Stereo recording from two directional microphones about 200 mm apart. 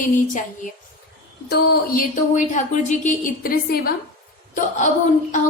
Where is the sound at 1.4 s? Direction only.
50° left (ahead or behind).